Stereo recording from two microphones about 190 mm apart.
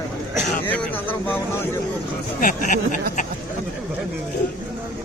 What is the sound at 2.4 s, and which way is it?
Speech, 45° left (ahead or behind).